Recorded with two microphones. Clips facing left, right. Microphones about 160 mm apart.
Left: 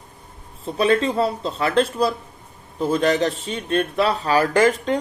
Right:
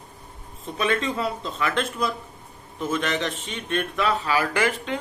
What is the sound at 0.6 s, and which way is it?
A man's voice, 35° left (ahead or behind).